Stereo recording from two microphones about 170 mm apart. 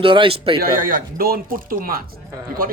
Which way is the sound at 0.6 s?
55° right (ahead or behind).